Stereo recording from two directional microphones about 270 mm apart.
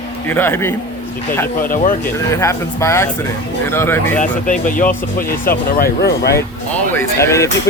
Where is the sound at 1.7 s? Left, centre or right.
Left.